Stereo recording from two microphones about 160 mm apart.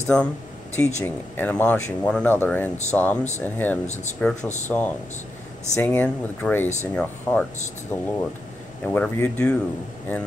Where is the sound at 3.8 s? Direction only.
45° left (ahead or behind).